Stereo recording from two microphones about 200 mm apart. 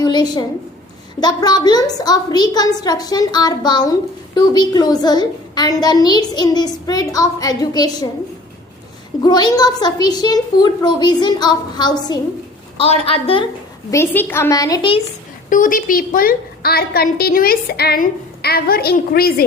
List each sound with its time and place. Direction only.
0.0 s a child's voice: 20° left (ahead or behind)
9.2 s a child's voice: 20° left (ahead or behind)
13.9 s a woman's voice: 10° left (ahead or behind)
15.4 s a woman's voice: 40° left (ahead or behind)